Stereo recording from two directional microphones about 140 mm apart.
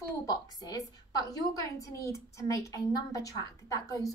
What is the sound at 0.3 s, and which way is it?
A woman's voice, 25° left (ahead or behind).